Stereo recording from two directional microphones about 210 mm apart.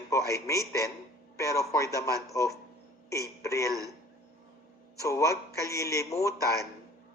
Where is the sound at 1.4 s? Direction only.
15° left (ahead or behind).